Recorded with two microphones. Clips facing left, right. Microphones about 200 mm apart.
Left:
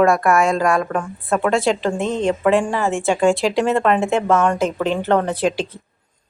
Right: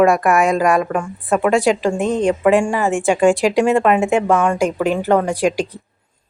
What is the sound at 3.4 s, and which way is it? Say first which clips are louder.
A woman's voice: right 3 dB; 15° right (ahead or behind).